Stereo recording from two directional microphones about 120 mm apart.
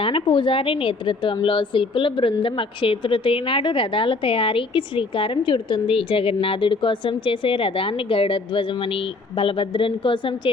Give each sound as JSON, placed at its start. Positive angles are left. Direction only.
{"t": 0.0, "sound": "a woman's voice", "side_deg": 45}